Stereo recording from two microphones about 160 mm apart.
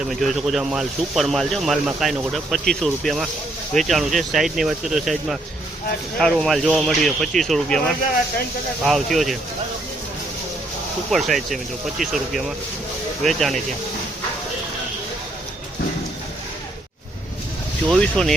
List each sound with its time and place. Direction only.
0.1 s speech: centre (ahead or behind)
11.1 s speech: centre (ahead or behind)
18.0 s speech: 5° left (ahead or behind)